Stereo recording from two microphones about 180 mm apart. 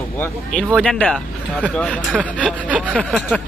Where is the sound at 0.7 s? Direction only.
5° left (ahead or behind).